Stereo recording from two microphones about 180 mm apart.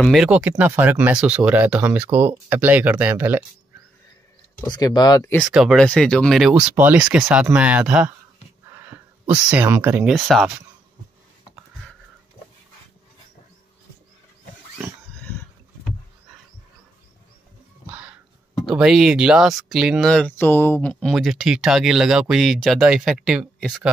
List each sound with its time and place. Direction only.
0.0 s speech: centre (ahead or behind)
4.6 s speech: 20° left (ahead or behind)
5.4 s speech: centre (ahead or behind)
8.6 s a sound: 15° right (ahead or behind)
9.5 s speech: 10° right (ahead or behind)
17.8 s a sound: 5° right (ahead or behind)
18.7 s speech: 5° right (ahead or behind)